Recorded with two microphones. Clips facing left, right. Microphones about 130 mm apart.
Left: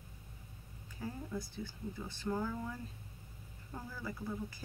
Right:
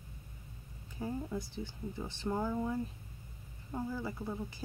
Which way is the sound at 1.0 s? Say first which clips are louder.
Right 4 dB; 20° right (ahead or behind).